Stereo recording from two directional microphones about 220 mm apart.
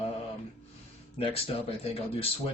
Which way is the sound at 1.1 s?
25° left (ahead or behind).